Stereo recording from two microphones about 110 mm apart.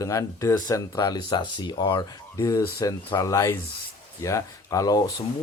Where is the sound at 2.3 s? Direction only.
30° left (ahead or behind).